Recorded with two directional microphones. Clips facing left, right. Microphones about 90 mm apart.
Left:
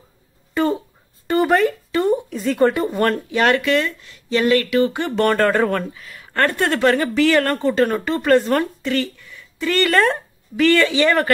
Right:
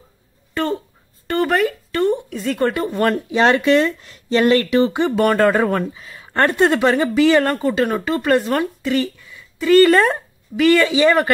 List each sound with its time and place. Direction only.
0.6 s a sound: 5° left (ahead or behind)
3.3 s speech: 25° right (ahead or behind)
5.1 s speech: 10° right (ahead or behind)
9.8 s speech: 20° right (ahead or behind)